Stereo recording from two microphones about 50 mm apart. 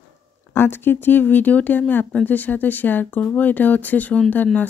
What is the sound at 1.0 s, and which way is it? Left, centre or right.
Speech, left.